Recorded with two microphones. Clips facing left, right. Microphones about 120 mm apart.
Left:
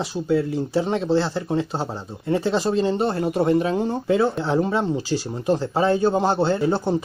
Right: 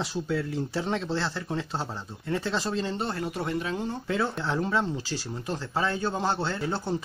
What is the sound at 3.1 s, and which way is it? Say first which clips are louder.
Speech: left 11 dB; 30° left (ahead or behind).